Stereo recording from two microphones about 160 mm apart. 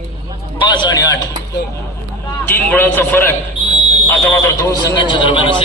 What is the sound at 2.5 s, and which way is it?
Speech, 15° left (ahead or behind).